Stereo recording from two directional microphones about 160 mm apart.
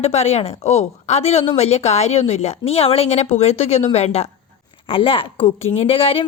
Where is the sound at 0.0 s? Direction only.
45° left (ahead or behind).